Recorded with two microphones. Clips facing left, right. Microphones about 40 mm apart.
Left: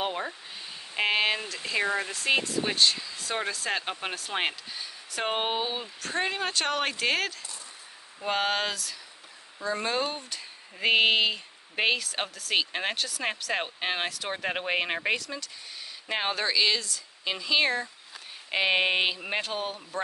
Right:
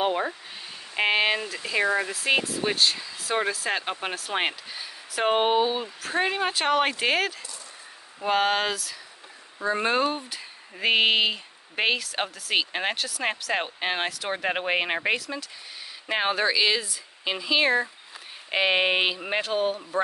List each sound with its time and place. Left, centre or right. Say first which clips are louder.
0.0 s speech: right 6 dB; centre
9.6 s speech: right 5 dB; right
10.0 s speech: right 6 dB; centre